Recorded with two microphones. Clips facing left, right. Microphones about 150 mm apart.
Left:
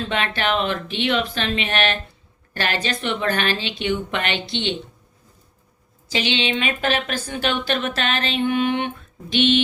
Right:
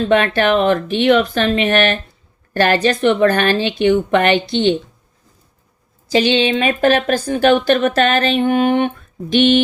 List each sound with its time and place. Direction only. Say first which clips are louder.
0.1 s speech: right 9 dB; 50° right (ahead or behind)
6.1 s speech: right 9 dB; 40° right (ahead or behind)